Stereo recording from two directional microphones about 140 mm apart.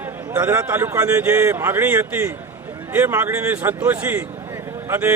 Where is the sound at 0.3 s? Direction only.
15° right (ahead or behind).